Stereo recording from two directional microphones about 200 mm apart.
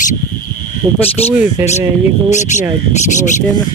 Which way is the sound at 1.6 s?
10° right (ahead or behind).